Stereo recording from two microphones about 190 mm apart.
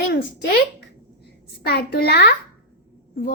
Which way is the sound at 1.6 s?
55° left (ahead or behind).